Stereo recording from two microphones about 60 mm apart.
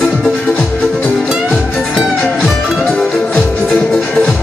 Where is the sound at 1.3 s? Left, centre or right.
Centre.